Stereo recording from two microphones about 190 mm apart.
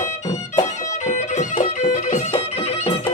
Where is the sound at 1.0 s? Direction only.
40° left (ahead or behind).